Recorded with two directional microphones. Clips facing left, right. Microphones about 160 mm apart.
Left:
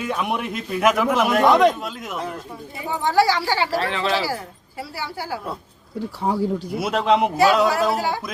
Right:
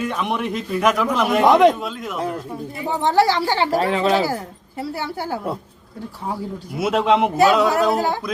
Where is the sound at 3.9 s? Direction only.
40° right (ahead or behind).